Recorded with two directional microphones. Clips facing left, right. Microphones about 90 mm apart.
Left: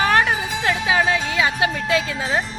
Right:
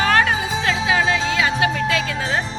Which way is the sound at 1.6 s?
20° left (ahead or behind).